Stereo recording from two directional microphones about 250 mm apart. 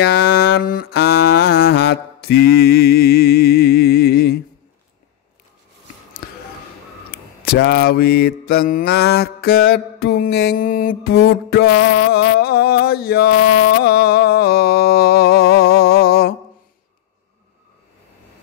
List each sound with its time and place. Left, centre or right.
0.0 s a sound: left
0.7 s mantra: left
7.1 s mantra: left